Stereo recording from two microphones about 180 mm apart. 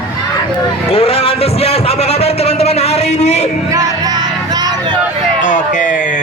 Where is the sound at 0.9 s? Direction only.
30° left (ahead or behind).